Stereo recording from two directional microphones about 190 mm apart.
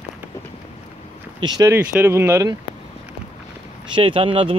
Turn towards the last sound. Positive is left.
turn(degrees=-30)  # may be behind; listen again after turning